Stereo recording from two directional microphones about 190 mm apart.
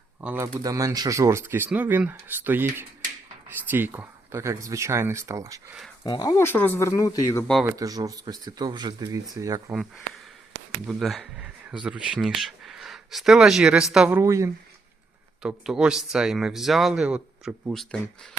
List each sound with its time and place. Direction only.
0.2 s speech: 10° right (ahead or behind)
3.7 s speech: 10° right (ahead or behind)
6.1 s speech: 20° left (ahead or behind)
7.6 s speech: 15° right (ahead or behind)
10.8 s speech: centre (ahead or behind)
14.2 s speech: 15° right (ahead or behind)
15.4 s speech: 5° right (ahead or behind)